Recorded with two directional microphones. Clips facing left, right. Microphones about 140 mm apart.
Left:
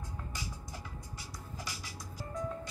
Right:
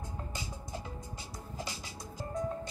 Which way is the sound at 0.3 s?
25° right (ahead or behind).